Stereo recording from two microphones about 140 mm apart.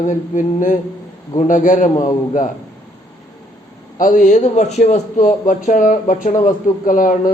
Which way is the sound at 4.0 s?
75° left (ahead or behind).